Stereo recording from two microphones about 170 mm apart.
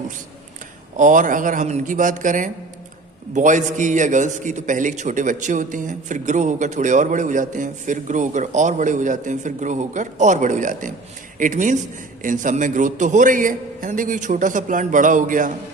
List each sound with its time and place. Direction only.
0.9 s a man's voice: 50° right (ahead or behind)